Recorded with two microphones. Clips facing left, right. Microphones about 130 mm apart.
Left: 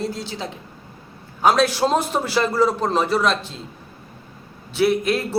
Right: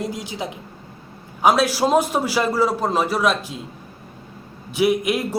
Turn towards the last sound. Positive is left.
turn(degrees=-15)  # may be behind; listen again after turning